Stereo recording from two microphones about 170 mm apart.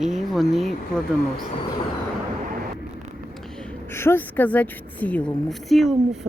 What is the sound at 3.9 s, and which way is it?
A woman's voice, 15° left (ahead or behind).